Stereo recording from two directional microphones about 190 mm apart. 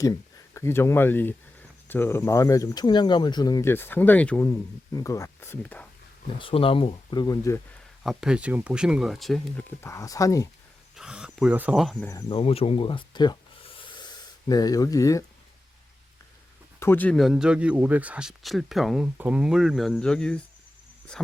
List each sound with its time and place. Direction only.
0.0 s speech: 15° left (ahead or behind)
6.4 s speech: 30° left (ahead or behind)
8.0 s speech: 5° right (ahead or behind); by 10.5 s 15° left (ahead or behind)
10.9 s speech: 5° right (ahead or behind)
12.3 s speech: 30° left (ahead or behind)
16.8 s speech: 10° left (ahead or behind)